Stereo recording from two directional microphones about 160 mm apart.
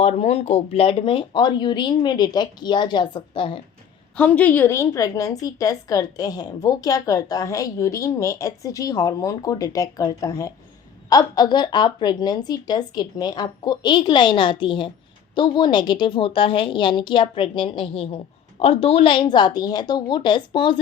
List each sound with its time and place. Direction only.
0.0 s a woman's voice: 40° left (ahead or behind)
4.2 s a woman's voice: 10° left (ahead or behind); by 20.8 s 30° left (ahead or behind)